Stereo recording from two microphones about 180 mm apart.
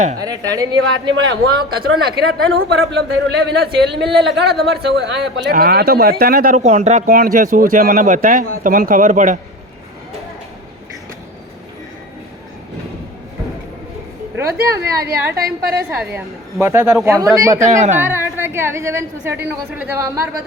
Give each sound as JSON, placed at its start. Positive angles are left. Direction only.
{"t": 0.2, "sound": "a woman's voice", "side_deg": -20}
{"t": 1.1, "sound": "a man's voice", "side_deg": -90}
{"t": 2.9, "sound": "a man's voice", "side_deg": -65}
{"t": 14.3, "sound": "a woman's voice", "side_deg": -15}
{"t": 14.8, "sound": "speech", "side_deg": -60}
{"t": 15.9, "sound": "a woman's voice", "side_deg": -15}
{"t": 17.7, "sound": "a woman's voice", "side_deg": -40}
{"t": 18.0, "sound": "a woman's voice", "side_deg": -15}